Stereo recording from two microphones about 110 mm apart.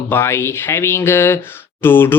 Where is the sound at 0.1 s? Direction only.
20° left (ahead or behind).